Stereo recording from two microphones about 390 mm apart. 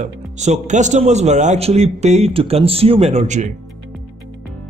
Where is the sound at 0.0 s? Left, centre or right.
Centre.